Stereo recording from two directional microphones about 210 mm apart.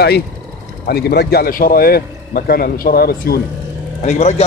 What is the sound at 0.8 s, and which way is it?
A man's voice, 50° left (ahead or behind).